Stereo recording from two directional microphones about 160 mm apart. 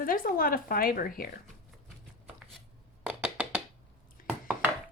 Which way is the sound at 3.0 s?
5° right (ahead or behind).